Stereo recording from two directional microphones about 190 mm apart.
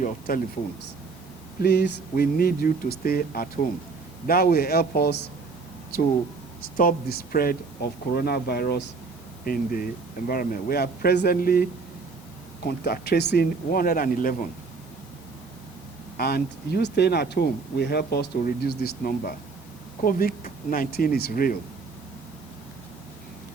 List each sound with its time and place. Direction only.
0.3 s speech: 50° left (ahead or behind)
1.6 s speech: 55° left (ahead or behind)
6.7 s speech: 50° left (ahead or behind)
12.6 s speech: 55° left (ahead or behind)
16.1 s speech: 55° left (ahead or behind)